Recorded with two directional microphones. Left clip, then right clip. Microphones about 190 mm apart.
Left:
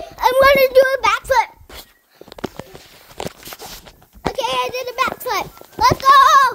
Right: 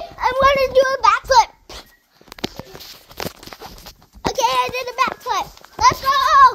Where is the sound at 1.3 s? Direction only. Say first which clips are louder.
Right 3 dB; centre (ahead or behind).